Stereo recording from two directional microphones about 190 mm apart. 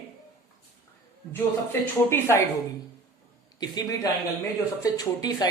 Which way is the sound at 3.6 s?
20° left (ahead or behind).